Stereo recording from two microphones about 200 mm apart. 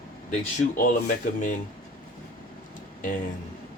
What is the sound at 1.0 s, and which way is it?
Speech, 40° left (ahead or behind).